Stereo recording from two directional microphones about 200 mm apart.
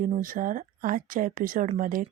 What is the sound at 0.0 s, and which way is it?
Speech, 40° right (ahead or behind).